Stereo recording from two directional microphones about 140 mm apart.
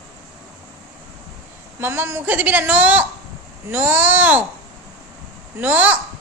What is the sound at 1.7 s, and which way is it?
A woman's voice, 15° right (ahead or behind).